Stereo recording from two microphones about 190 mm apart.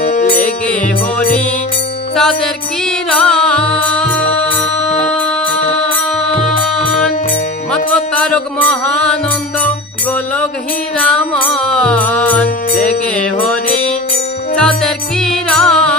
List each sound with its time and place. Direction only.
0.0 s music: 40° left (ahead or behind)
2.1 s music: 5° left (ahead or behind)
7.7 s music: 5° left (ahead or behind)
11.0 s music: 5° left (ahead or behind)
14.6 s music: 5° left (ahead or behind)